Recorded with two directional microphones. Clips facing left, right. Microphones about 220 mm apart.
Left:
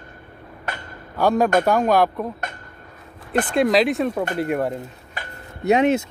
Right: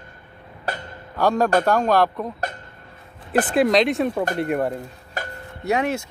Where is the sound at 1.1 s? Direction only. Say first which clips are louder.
Left 1 dB; centre (ahead or behind).